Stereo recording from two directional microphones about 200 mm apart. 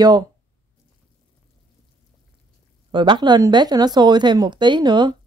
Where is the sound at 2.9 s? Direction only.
25° right (ahead or behind).